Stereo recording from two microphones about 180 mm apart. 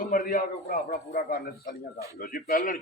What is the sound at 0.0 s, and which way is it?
A man's voice, 50° left (ahead or behind).